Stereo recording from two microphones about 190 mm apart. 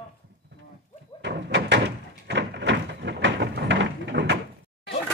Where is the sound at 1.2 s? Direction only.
65° right (ahead or behind).